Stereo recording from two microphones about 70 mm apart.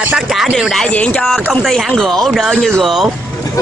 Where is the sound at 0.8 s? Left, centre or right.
Centre.